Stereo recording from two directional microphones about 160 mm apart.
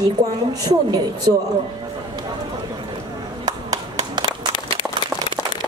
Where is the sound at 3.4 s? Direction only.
25° right (ahead or behind).